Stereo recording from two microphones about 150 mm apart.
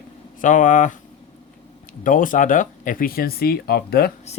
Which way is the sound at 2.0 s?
60° left (ahead or behind).